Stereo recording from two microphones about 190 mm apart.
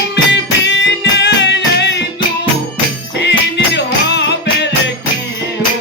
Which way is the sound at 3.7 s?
65° left (ahead or behind).